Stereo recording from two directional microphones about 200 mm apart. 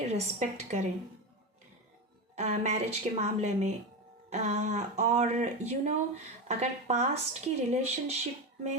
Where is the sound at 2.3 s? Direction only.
35° right (ahead or behind).